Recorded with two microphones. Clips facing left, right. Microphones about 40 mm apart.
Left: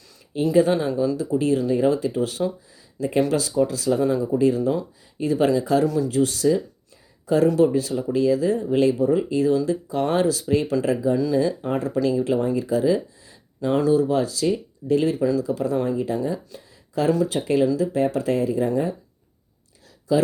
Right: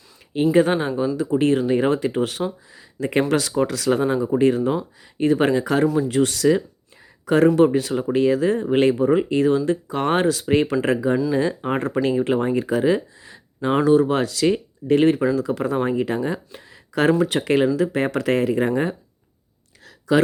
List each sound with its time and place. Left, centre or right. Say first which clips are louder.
0.3 s speech: right 3 dB; right
0.7 s speech: even; right
1.1 s speech: right 2 dB; right
4.3 s speech: right 2 dB; right
5.8 s speech: right 2 dB; right
6.1 s speech: right 2 dB; right
7.3 s speech: right 2 dB; right
11.3 s speech: even; right
17.2 s speech: right 2 dB; right
19.8 s a sound: right 3 dB; right